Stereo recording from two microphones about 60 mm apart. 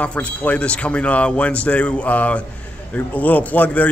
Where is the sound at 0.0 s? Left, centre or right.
Left.